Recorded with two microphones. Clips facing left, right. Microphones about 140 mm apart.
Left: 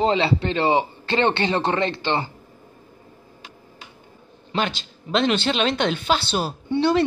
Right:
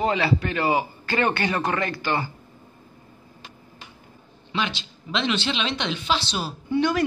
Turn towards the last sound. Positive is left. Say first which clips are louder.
# left 3 dB
turn(degrees=30)  # may be behind; listen again after turning